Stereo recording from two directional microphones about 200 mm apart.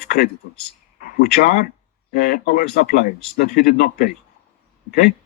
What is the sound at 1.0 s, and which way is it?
Speech, 45° left (ahead or behind).